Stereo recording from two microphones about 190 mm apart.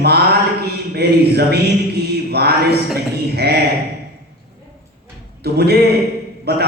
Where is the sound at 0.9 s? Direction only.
55° right (ahead or behind).